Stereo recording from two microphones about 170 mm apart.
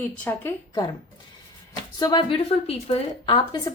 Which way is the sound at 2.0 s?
25° left (ahead or behind).